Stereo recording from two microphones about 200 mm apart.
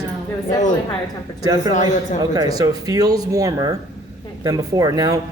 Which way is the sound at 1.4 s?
20° right (ahead or behind).